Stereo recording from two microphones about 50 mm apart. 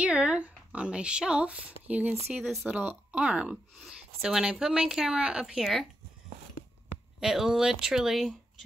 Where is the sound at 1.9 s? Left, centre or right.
Right.